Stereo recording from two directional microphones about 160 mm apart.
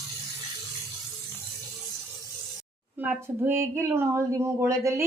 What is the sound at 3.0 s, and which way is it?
Speech, 15° right (ahead or behind).